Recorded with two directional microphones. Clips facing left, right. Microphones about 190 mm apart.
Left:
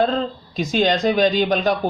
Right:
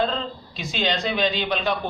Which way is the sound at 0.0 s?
45° left (ahead or behind).